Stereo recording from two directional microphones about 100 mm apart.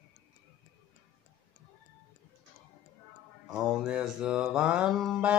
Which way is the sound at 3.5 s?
10° right (ahead or behind).